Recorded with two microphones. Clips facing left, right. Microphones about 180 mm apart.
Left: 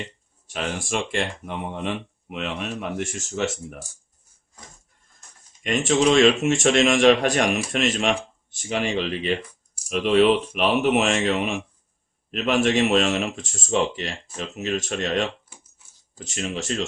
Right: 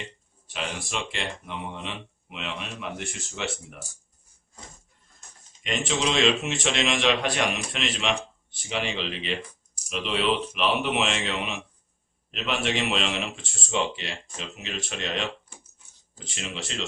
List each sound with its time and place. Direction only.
0.5 s a man's voice: 45° left (ahead or behind)
5.6 s a man's voice: 50° left (ahead or behind)